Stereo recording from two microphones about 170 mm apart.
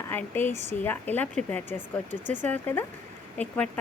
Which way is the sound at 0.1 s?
10° left (ahead or behind).